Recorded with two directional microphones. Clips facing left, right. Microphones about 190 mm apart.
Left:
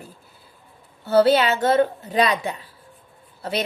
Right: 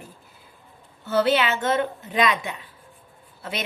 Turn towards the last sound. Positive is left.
turn(degrees=35)  # may be behind; listen again after turning